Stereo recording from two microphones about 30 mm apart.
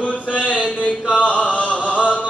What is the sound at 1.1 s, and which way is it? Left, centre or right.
Chant, left.